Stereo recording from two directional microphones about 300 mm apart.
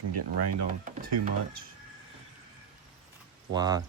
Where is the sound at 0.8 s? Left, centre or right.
Right.